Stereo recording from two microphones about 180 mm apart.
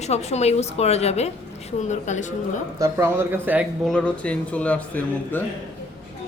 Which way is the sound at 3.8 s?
5° left (ahead or behind).